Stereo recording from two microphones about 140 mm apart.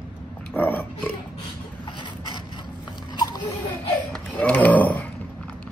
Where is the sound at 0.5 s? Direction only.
10° left (ahead or behind).